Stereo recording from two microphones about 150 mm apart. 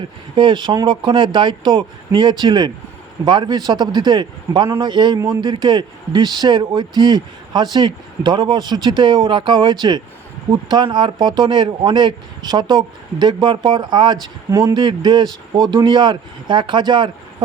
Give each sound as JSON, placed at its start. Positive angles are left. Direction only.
{"t": 0.3, "sound": "a man's voice", "side_deg": -30}